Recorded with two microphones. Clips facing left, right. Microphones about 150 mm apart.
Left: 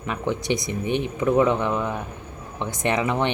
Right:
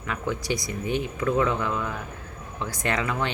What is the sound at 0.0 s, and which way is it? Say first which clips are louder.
Speech: left 3 dB; 20° left (ahead or behind).